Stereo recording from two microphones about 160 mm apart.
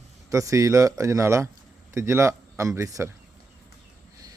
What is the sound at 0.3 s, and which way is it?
Speech, 20° right (ahead or behind).